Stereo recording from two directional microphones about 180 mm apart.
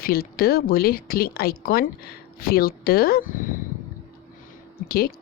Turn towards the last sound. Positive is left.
turn(degrees=60)  # may be behind; listen again after turning